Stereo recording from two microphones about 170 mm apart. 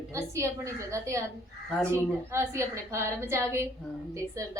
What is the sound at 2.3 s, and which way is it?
A woman's voice, 15° right (ahead or behind).